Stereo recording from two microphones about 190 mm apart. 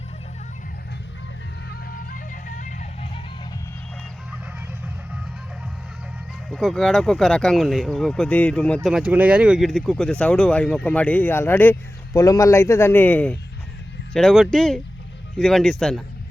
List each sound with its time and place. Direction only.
1.7 s music: 50° left (ahead or behind)
6.5 s speech: centre (ahead or behind)
8.9 s speech: 5° right (ahead or behind)